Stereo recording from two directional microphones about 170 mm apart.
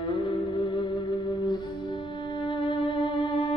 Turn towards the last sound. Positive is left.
turn(degrees=30)  # may be behind; listen again after turning